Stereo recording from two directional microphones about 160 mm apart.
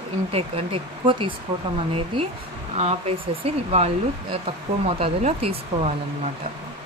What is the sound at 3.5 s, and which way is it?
Speech, 40° right (ahead or behind).